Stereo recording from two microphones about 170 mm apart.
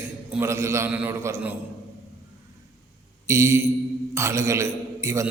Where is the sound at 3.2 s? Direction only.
15° right (ahead or behind).